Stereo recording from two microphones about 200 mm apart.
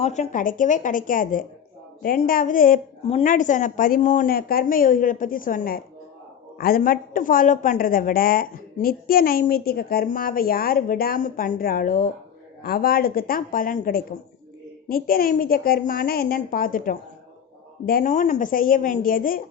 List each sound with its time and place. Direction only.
0.0 s a woman's voice: 35° left (ahead or behind)